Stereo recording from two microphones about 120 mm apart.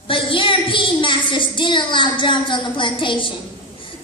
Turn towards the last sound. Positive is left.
turn(degrees=45)  # may be behind; listen again after turning